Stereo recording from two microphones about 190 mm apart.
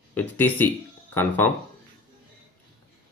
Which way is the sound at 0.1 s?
10° left (ahead or behind).